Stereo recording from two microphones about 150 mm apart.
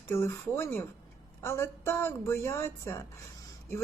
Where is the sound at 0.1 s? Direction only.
15° left (ahead or behind).